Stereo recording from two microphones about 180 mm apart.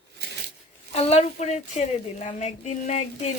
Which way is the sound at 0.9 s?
35° left (ahead or behind).